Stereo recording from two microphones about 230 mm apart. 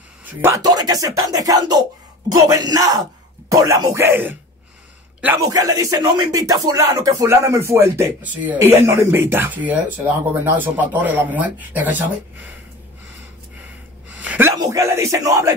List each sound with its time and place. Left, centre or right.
0.2 s speech: centre
14.1 s speech: centre